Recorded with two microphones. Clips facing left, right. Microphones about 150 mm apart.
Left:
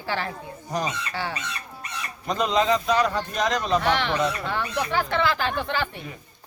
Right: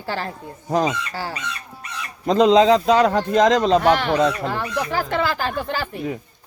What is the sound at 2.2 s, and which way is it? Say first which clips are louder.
A man's voice: right 9 dB; 90° right.